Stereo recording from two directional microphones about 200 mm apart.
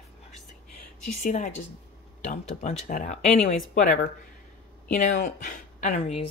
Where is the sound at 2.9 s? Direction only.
40° left (ahead or behind).